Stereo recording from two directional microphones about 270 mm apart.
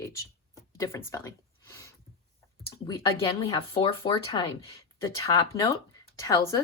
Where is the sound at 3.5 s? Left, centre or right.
Centre.